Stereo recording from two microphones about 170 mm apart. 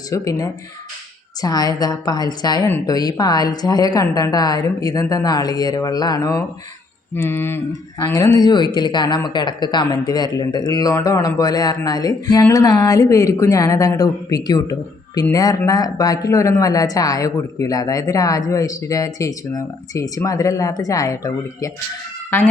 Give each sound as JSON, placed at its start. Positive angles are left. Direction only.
{"t": 0.1, "sound": "speech", "side_deg": 20}